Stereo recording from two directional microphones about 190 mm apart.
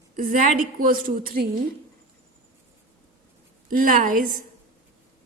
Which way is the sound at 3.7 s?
45° right (ahead or behind).